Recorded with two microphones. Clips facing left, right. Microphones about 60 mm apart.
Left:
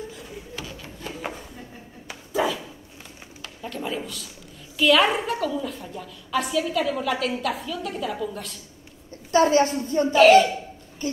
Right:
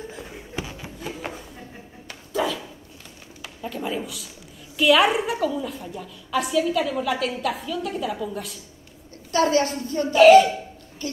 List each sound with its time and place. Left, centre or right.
0.6 s a sound: centre
2.0 s dog: centre
3.4 s a sound: centre
4.7 s a woman's voice: centre
9.3 s a woman's voice: left
10.1 s a woman's voice: centre